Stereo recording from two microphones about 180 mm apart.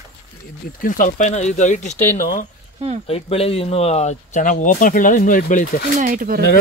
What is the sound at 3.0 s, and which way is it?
Speech, 35° left (ahead or behind).